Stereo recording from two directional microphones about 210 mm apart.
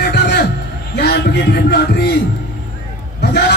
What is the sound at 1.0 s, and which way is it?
Speech, 50° left (ahead or behind).